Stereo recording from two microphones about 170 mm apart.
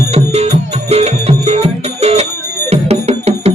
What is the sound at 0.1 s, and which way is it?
Music, 35° right (ahead or behind).